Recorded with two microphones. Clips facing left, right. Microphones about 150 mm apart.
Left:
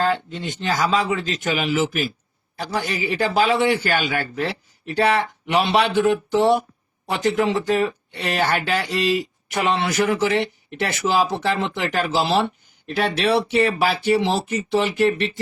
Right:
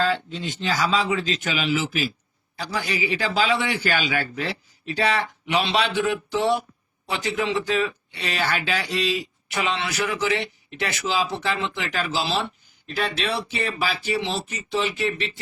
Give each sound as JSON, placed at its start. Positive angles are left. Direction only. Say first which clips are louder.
{"t": 0.0, "sound": "a man's voice", "louder": "left 2 dB", "side_deg": 50}